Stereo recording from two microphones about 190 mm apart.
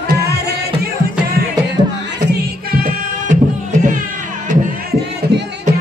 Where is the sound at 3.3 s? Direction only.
40° right (ahead or behind).